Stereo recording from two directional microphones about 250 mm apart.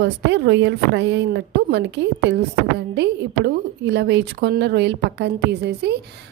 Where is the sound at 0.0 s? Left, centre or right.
Right.